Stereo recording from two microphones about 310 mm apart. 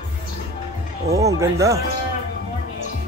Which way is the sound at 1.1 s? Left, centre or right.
Centre.